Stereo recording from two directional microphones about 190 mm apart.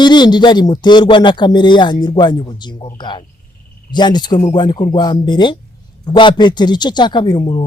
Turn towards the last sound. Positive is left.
turn(degrees=25)  # may be behind; listen again after turning